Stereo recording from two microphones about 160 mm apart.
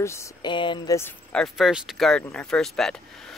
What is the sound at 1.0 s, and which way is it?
Speech, 15° left (ahead or behind).